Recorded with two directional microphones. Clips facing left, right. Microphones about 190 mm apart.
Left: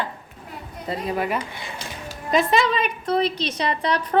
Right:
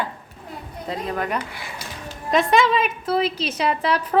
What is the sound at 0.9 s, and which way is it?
A woman's voice, 5° left (ahead or behind).